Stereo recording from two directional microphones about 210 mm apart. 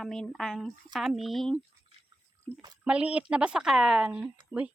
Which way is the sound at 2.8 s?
5° right (ahead or behind).